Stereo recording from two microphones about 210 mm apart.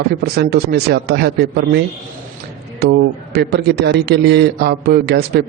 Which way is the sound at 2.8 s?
50° right (ahead or behind).